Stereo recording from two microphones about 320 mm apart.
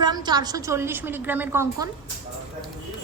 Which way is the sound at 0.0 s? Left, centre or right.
Centre.